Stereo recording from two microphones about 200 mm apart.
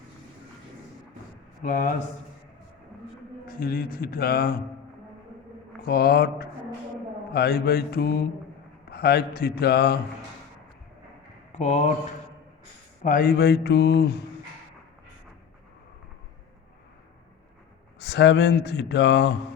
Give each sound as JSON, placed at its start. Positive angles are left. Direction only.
{"t": 1.6, "sound": "speech", "side_deg": 40}
{"t": 3.4, "sound": "a man's voice", "side_deg": 50}
{"t": 5.8, "sound": "a man's voice", "side_deg": 50}
{"t": 11.5, "sound": "speech", "side_deg": 35}
{"t": 13.0, "sound": "speech", "side_deg": 45}
{"t": 18.0, "sound": "speech", "side_deg": 60}